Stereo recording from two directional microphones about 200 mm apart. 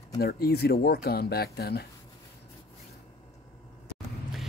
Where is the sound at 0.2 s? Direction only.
50° left (ahead or behind).